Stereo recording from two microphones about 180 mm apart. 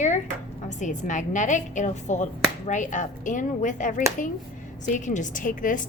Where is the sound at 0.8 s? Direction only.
45° left (ahead or behind).